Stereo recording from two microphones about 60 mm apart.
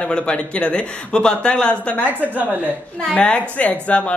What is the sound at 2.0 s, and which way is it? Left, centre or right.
Speech, right.